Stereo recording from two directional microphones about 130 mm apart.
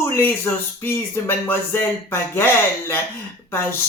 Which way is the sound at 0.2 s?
15° left (ahead or behind).